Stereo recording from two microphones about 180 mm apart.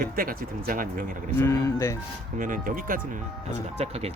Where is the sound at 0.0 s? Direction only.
50° right (ahead or behind).